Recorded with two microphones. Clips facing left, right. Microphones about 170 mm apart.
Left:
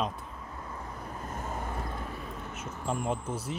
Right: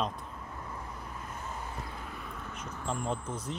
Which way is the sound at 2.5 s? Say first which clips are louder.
Left 3 dB; 5° left (ahead or behind).